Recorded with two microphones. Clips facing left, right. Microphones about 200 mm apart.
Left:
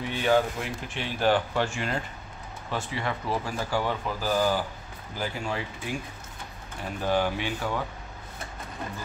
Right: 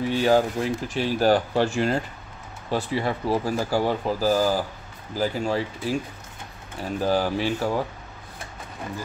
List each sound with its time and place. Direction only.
0.1 s speech: 35° right (ahead or behind)
7.0 s speech: 35° right (ahead or behind)